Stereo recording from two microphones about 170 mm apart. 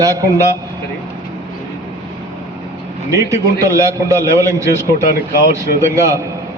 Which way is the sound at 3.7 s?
20° right (ahead or behind).